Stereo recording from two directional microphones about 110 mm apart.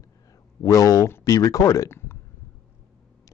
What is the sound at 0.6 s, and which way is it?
Speech, 30° left (ahead or behind).